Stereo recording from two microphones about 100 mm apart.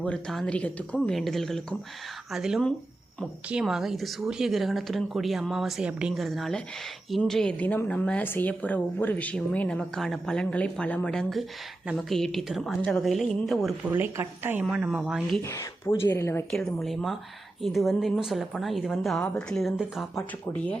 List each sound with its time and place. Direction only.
0.0 s speech: 5° left (ahead or behind); by 6.2 s 10° right (ahead or behind)
6.2 s a woman's voice: centre (ahead or behind)
13.8 s a woman's voice: 20° right (ahead or behind)
16.0 s a woman's voice: 25° left (ahead or behind)
16.5 s speech: 5° left (ahead or behind)